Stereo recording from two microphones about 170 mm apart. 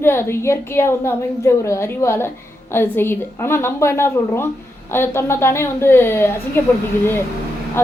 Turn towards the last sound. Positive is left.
turn(degrees=15)  # may be behind; listen again after turning